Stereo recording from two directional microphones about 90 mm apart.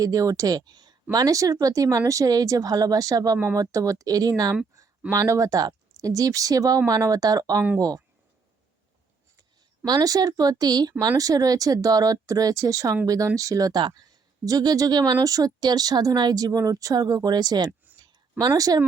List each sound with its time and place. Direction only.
0.0 s speech: 40° right (ahead or behind)
1.1 s speech: 40° right (ahead or behind)
9.8 s speech: 45° right (ahead or behind)
18.0 s a sound: 45° right (ahead or behind)